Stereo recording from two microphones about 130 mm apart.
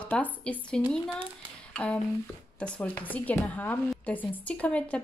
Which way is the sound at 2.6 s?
10° left (ahead or behind).